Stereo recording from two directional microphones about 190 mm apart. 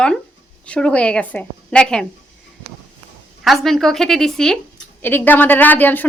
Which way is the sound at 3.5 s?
Centre (ahead or behind).